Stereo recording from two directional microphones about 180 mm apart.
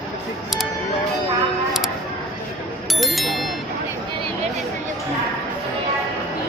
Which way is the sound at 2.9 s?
Centre (ahead or behind).